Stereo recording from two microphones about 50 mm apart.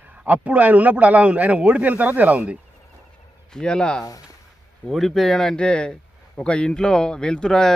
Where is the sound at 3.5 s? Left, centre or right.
Centre.